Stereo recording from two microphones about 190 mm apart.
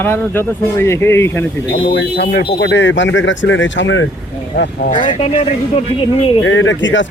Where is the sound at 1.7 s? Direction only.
65° left (ahead or behind).